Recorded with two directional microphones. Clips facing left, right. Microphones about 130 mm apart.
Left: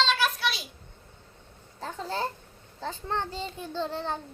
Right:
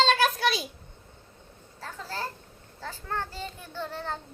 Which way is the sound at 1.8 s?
25° left (ahead or behind).